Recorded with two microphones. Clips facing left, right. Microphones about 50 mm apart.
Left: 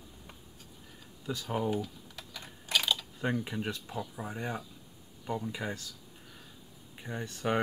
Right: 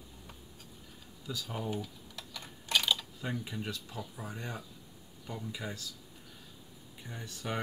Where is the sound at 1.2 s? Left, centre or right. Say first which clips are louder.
Left 3 dB; left.